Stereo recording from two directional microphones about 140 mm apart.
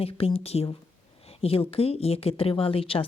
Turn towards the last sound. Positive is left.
turn(degrees=40)  # may be behind; listen again after turning